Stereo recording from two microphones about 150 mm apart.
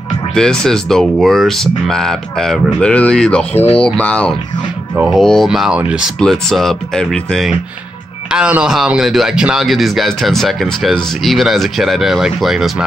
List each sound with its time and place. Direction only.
0.3 s speech: 5° left (ahead or behind)
4.9 s speech: 10° right (ahead or behind)
5.2 s speech: centre (ahead or behind)